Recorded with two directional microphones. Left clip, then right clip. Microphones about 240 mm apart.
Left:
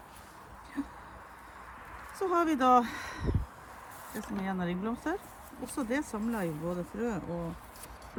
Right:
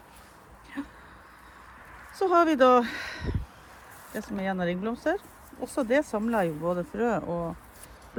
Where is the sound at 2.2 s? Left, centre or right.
Centre.